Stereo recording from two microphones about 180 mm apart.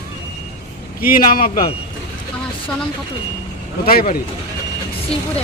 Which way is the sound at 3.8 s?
55° left (ahead or behind).